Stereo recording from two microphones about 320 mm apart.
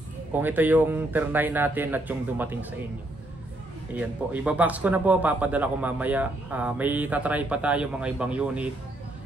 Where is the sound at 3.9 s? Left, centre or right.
Centre.